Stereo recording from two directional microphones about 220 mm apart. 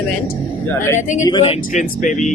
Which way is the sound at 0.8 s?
10° left (ahead or behind).